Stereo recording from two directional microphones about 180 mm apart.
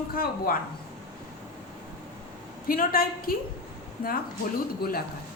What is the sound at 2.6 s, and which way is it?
Speech, 55° left (ahead or behind).